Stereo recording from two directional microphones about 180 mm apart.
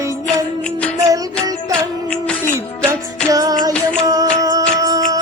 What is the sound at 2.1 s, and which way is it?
Music, 5° left (ahead or behind).